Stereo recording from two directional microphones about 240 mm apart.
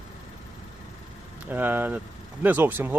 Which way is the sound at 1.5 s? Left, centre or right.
Centre.